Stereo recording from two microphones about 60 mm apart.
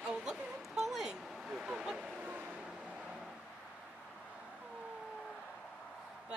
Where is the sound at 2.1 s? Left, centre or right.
Right.